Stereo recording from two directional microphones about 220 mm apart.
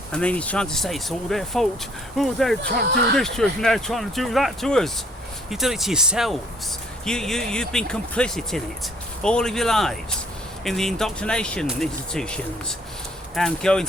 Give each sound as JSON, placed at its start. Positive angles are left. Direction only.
{"t": 0.1, "sound": "speech", "side_deg": 5}
{"t": 2.6, "sound": "speech", "side_deg": -45}
{"t": 3.2, "sound": "speech", "side_deg": 0}